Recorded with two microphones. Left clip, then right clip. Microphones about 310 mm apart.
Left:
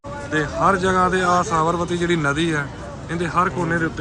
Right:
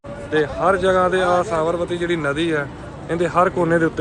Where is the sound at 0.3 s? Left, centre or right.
Centre.